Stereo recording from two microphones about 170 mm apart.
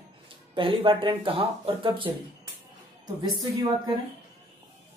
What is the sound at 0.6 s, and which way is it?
Speech, 30° right (ahead or behind).